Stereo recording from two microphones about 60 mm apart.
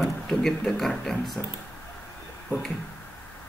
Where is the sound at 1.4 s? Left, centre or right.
Left.